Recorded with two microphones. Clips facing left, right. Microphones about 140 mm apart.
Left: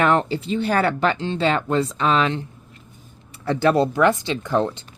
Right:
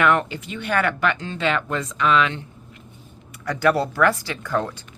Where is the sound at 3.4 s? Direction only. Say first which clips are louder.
Left 2 dB; 25° left (ahead or behind).